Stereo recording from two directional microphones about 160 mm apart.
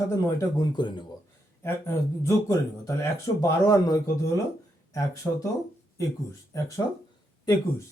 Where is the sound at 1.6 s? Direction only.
15° left (ahead or behind).